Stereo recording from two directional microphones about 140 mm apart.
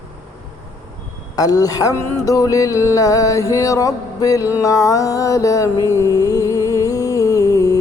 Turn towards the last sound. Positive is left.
turn(degrees=25)  # may be behind; listen again after turning